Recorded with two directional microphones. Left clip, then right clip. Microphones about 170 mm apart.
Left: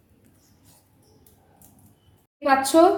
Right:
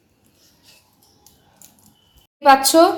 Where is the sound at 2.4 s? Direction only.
35° right (ahead or behind).